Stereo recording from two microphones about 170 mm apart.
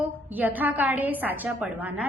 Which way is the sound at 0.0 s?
10° right (ahead or behind).